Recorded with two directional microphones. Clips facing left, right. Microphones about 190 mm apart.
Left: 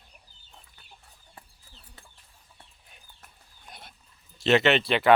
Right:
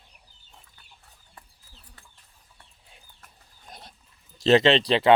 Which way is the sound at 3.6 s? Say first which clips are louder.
Right 2 dB; 40° right (ahead or behind).